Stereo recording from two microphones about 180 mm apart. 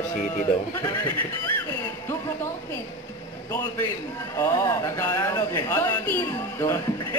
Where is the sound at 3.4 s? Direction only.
10° left (ahead or behind).